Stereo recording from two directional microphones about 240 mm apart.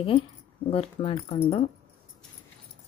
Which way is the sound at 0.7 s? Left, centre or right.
Left.